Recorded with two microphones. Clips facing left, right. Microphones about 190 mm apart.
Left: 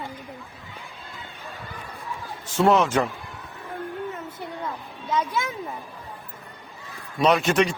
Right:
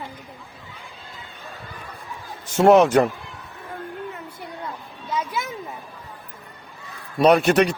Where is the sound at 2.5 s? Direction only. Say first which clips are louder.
Right 5 dB; 45° right (ahead or behind).